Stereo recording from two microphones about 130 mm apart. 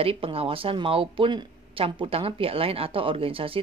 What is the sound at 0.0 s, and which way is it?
Speech, 45° right (ahead or behind).